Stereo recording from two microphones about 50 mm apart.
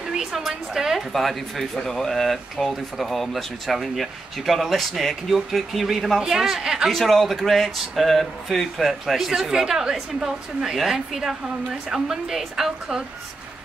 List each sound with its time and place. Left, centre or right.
0.1 s a woman's voice: centre
1.1 s speech: centre
6.9 s a woman's voice: centre